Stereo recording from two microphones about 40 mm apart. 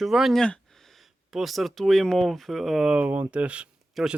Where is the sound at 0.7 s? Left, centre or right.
Centre.